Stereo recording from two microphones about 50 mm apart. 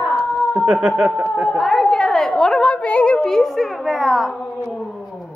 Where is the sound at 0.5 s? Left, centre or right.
Right.